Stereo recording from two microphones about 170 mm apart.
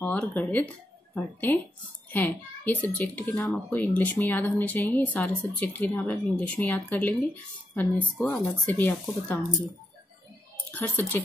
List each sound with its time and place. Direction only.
0.0 s speech: 10° left (ahead or behind)
10.7 s speech: 10° left (ahead or behind)